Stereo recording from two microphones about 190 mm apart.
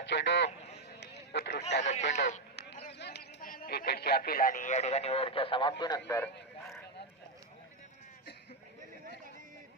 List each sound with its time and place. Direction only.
0.0 s speech: 65° left (ahead or behind)
0.9 s a sound: 60° left (ahead or behind)
1.8 s speech: 40° left (ahead or behind)
2.0 s a man's voice: 65° left (ahead or behind); by 5.7 s 25° left (ahead or behind)
6.1 s vehicle: 15° left (ahead or behind)